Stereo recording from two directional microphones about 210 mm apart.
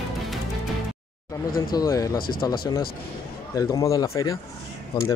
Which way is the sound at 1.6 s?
15° left (ahead or behind).